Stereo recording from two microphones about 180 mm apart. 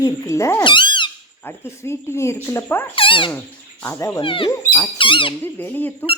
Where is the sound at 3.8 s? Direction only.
15° left (ahead or behind).